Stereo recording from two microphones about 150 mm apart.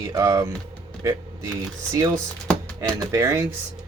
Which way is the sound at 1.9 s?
25° right (ahead or behind).